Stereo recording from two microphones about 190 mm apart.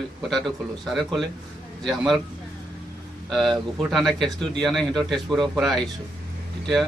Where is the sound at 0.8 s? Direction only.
Centre (ahead or behind).